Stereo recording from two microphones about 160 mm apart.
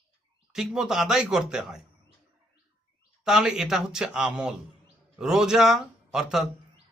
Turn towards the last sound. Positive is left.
turn(degrees=-5)  # may be behind; listen again after turning